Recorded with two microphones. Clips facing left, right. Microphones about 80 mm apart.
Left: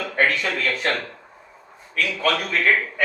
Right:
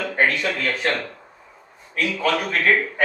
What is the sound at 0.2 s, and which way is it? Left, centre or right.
Speech, right.